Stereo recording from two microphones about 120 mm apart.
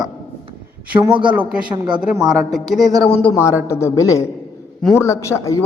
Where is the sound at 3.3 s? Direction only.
25° left (ahead or behind).